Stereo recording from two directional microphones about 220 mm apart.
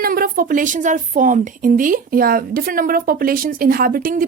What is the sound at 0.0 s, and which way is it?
A woman's voice, 40° right (ahead or behind).